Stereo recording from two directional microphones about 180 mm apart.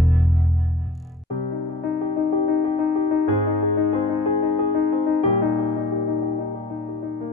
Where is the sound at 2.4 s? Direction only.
35° left (ahead or behind).